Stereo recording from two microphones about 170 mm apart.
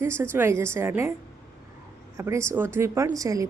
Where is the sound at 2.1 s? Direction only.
15° right (ahead or behind).